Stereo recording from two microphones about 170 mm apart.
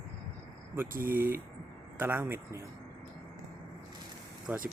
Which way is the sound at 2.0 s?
10° right (ahead or behind).